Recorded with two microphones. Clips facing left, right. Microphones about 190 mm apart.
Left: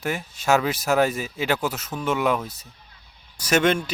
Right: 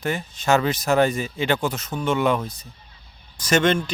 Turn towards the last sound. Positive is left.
turn(degrees=10)  # may be behind; listen again after turning